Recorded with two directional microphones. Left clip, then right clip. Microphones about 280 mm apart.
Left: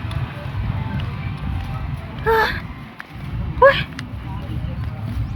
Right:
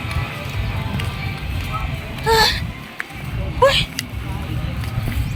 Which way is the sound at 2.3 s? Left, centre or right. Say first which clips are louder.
Right 2 dB; centre.